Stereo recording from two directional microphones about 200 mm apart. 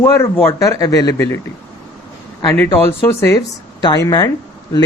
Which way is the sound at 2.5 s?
10° left (ahead or behind).